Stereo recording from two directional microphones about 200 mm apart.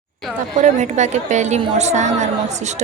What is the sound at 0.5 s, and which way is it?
A woman's voice, 35° right (ahead or behind).